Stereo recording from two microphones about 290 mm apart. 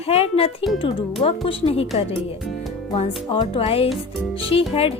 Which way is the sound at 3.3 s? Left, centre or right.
Centre.